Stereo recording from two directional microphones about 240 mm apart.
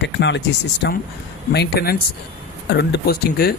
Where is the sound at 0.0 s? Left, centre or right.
Left.